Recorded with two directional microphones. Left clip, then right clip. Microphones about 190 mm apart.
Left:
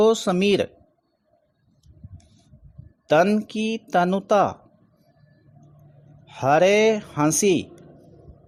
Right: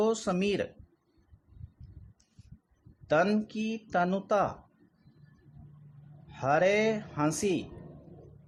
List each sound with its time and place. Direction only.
0.0 s speech: 40° left (ahead or behind)
3.1 s speech: 35° left (ahead or behind)
6.2 s speech: 40° left (ahead or behind)